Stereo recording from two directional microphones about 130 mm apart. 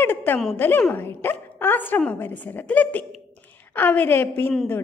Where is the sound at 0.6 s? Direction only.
15° left (ahead or behind).